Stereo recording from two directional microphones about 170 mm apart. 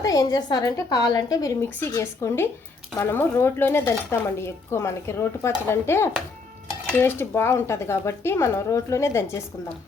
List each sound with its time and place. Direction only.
0.0 s a woman's voice: 20° left (ahead or behind)